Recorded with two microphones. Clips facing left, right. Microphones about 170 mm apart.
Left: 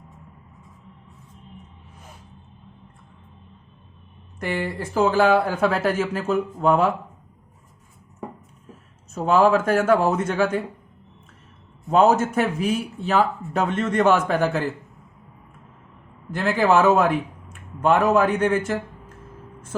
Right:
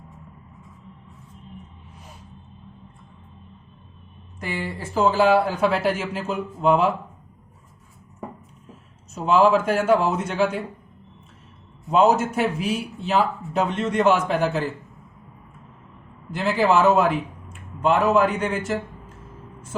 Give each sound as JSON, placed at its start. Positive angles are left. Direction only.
{"t": 4.4, "sound": "speech", "side_deg": 60}
{"t": 9.1, "sound": "speech", "side_deg": 50}
{"t": 11.9, "sound": "speech", "side_deg": 50}
{"t": 16.3, "sound": "speech", "side_deg": 55}